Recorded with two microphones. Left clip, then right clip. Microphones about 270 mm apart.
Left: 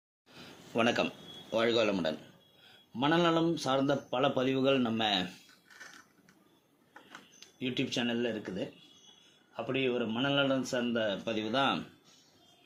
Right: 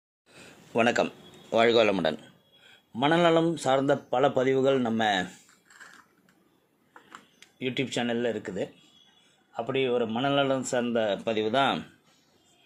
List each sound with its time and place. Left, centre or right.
0.7 s a man's voice: right
7.6 s speech: right